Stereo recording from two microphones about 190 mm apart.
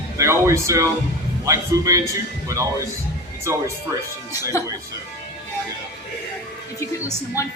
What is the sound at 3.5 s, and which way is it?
Speech, 15° right (ahead or behind).